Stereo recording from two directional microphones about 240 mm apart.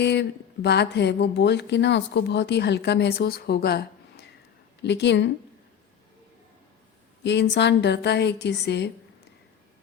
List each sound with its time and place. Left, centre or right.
0.0 s speech: left
7.3 s speech: left